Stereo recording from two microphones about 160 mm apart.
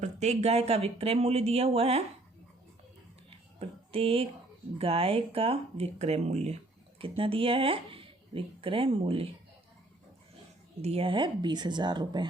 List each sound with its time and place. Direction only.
0.0 s speech: 45° right (ahead or behind)
3.2 s a sound: 35° right (ahead or behind)
4.8 s speech: 35° right (ahead or behind)
10.8 s speech: 35° right (ahead or behind)